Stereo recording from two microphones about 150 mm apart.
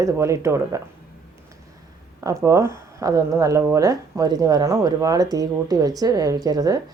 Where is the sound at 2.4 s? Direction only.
20° right (ahead or behind).